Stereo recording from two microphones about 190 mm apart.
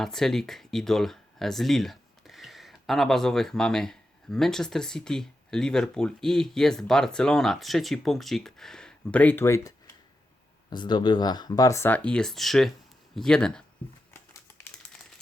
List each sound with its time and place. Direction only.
0.0 s speech: centre (ahead or behind)